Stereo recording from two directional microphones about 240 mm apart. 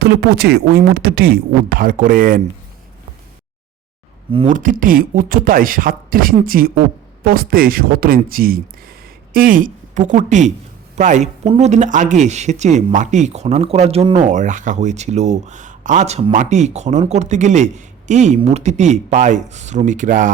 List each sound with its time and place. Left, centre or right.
0.0 s speech: right
4.3 s speech: right